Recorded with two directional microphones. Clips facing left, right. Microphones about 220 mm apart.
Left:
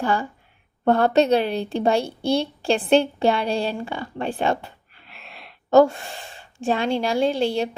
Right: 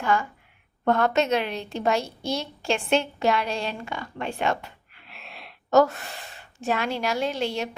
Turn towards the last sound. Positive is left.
turn(degrees=30)  # may be behind; listen again after turning